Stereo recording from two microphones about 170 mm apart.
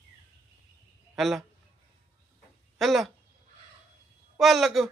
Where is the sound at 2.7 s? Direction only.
Centre (ahead or behind).